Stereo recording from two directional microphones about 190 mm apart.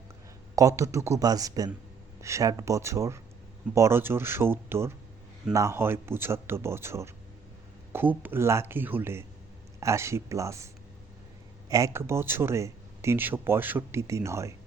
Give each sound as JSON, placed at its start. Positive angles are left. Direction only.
{"t": 0.5, "sound": "speech", "side_deg": -15}
{"t": 11.7, "sound": "speech", "side_deg": -15}